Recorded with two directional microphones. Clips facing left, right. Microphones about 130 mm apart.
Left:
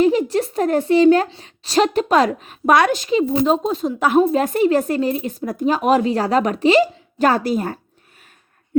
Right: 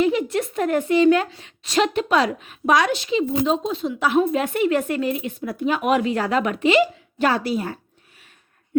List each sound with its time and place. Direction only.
0.0 s a woman's voice: 35° left (ahead or behind)